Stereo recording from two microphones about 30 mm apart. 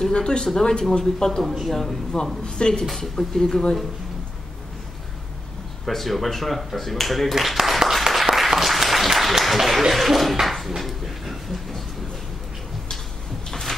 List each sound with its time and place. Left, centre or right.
0.1 s speech: left
1.4 s speech: centre
1.7 s speech: centre
2.5 s speech: left
3.0 s speech: centre
5.9 s speech: centre
7.3 s a sound: centre
8.1 s applause: centre
9.4 s a sound: centre
10.8 s train: centre
13.5 s a sound: centre